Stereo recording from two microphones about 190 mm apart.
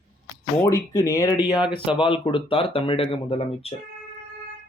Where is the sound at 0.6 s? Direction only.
15° left (ahead or behind).